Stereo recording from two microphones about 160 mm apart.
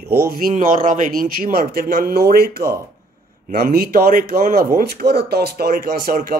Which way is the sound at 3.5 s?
65° right (ahead or behind).